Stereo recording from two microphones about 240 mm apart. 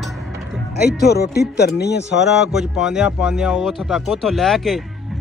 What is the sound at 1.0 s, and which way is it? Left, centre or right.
Speech, left.